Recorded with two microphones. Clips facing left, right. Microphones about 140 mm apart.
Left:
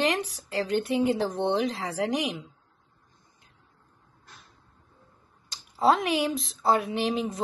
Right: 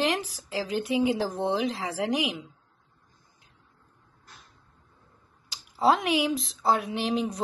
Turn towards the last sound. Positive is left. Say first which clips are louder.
# even
turn(degrees=0)  # may be behind; listen again after turning